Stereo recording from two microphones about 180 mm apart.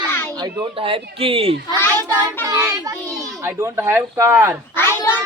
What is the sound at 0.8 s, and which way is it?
Speech, 30° right (ahead or behind).